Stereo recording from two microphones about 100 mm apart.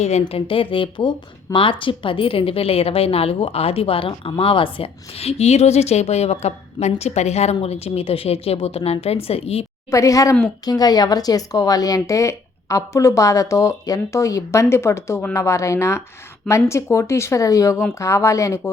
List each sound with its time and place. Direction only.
0.0 s a woman's voice: 90° left
9.9 s speech: 30° left (ahead or behind)